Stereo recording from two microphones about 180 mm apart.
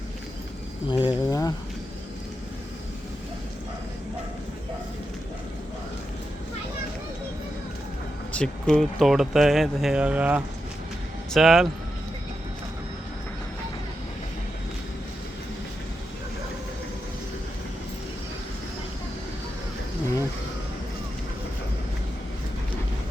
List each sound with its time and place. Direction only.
0.9 s speech: 25° left (ahead or behind)
8.3 s speech: 5° left (ahead or behind)